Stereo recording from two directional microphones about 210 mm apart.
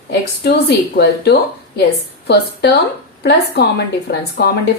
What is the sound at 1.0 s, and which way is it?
Speech, 50° left (ahead or behind).